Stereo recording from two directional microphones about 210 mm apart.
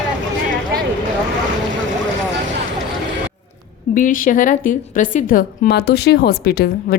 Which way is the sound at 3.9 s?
40° left (ahead or behind).